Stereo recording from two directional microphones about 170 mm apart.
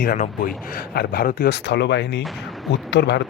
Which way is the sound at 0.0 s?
55° left (ahead or behind).